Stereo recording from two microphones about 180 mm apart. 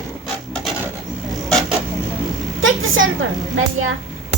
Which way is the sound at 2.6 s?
90° right.